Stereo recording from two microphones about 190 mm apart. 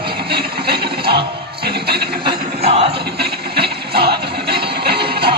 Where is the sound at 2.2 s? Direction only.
25° right (ahead or behind).